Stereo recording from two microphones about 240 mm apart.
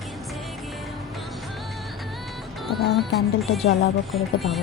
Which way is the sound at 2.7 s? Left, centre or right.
Centre.